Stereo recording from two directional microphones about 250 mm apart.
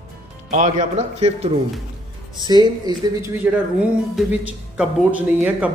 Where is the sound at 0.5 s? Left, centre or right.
Right.